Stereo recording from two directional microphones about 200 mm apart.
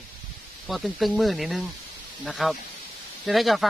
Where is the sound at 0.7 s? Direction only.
Centre (ahead or behind).